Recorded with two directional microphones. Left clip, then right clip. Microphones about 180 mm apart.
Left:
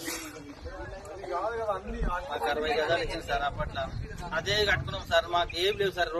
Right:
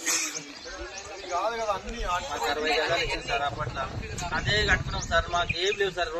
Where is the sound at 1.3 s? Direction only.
20° left (ahead or behind).